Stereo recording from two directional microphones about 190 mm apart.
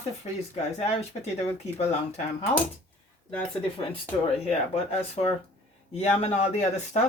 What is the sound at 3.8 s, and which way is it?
Speech, 30° left (ahead or behind).